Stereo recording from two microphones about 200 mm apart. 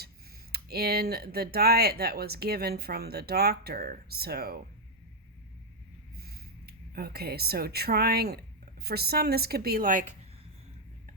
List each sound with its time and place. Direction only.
0.5 s speech: 50° right (ahead or behind)
6.1 s speech: 50° right (ahead or behind)